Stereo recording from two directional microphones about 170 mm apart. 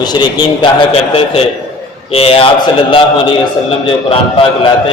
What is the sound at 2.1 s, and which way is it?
Speech, 35° left (ahead or behind).